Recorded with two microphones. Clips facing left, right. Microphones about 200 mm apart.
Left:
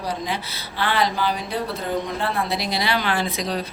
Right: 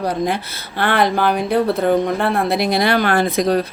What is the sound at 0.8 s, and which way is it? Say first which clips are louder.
Speech: right 6 dB; 55° right (ahead or behind).